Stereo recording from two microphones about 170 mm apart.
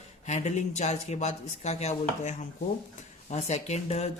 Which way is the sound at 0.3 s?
45° left (ahead or behind).